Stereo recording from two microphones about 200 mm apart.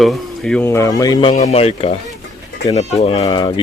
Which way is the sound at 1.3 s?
35° left (ahead or behind).